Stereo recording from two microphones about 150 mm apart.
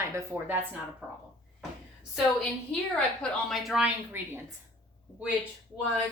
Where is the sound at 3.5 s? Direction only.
Centre (ahead or behind).